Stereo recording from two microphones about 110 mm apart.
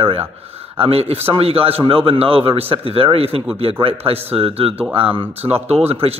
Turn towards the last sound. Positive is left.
turn(degrees=-65)  # may be behind; listen again after turning